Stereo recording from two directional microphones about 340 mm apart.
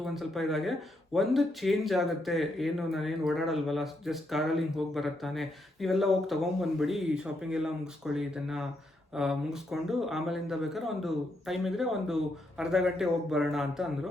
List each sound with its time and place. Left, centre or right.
0.0 s speech: centre